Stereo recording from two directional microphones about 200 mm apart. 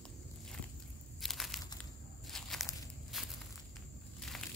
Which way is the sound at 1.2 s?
Centre (ahead or behind).